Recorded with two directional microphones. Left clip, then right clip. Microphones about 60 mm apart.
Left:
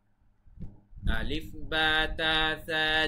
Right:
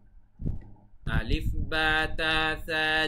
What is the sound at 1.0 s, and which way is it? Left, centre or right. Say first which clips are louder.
Speech: right 1 dB; right.